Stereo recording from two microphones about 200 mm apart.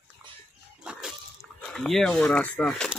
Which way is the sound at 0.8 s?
Centre (ahead or behind).